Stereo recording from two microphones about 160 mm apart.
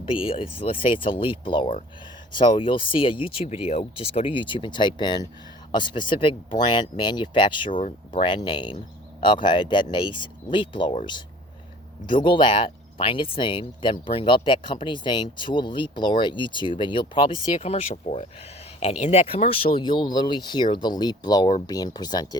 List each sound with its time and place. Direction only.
0.0 s speech: 35° left (ahead or behind)
7.7 s speech: 55° left (ahead or behind)
8.1 s speech: 30° left (ahead or behind)
12.0 s speech: 30° left (ahead or behind)